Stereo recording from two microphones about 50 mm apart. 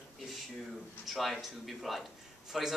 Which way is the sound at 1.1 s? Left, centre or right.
Centre.